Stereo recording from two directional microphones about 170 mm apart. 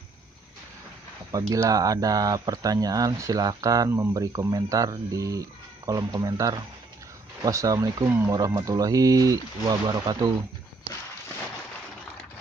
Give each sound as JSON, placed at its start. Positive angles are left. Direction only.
{"t": 1.5, "sound": "speech", "side_deg": -20}